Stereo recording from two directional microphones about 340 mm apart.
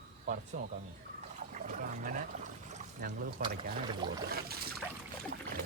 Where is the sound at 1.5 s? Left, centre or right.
Right.